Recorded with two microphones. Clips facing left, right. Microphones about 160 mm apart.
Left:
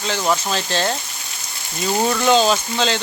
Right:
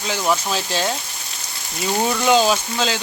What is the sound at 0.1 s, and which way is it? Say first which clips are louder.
Speech: even; 5° right (ahead or behind).